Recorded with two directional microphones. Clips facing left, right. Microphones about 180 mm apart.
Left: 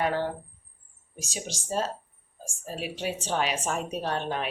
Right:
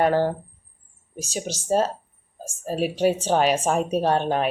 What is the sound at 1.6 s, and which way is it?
A woman's voice, 45° right (ahead or behind).